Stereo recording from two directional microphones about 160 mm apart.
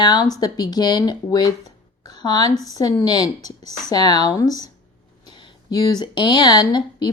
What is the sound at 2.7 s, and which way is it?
Speech, 25° left (ahead or behind).